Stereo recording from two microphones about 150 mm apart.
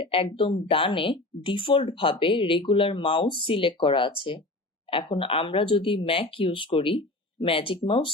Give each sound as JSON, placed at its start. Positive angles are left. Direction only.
{"t": 0.0, "sound": "speech", "side_deg": 35}